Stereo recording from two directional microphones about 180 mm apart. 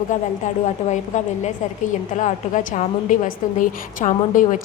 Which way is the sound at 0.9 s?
40° left (ahead or behind).